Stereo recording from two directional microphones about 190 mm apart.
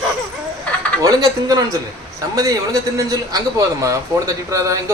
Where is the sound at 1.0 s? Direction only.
20° right (ahead or behind).